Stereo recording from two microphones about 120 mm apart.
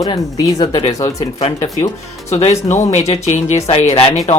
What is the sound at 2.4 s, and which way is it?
Speech, 75° left (ahead or behind).